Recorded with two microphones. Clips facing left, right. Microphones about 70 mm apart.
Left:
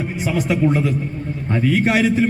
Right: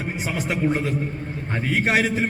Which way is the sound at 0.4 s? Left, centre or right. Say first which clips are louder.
Left 4 dB; right.